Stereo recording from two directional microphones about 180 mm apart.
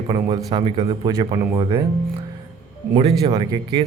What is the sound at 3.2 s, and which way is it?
Speech, 25° right (ahead or behind).